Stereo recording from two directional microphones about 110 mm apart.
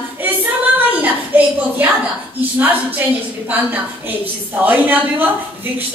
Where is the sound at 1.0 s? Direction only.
15° right (ahead or behind).